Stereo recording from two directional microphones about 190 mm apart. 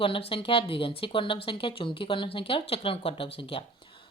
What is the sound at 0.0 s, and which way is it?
Speech, 30° left (ahead or behind).